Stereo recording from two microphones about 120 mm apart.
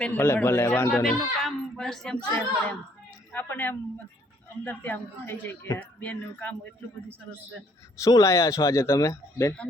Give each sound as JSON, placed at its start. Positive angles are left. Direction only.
{"t": 0.0, "sound": "speech", "side_deg": 15}
{"t": 1.0, "sound": "speech", "side_deg": 0}
{"t": 8.0, "sound": "speech", "side_deg": 25}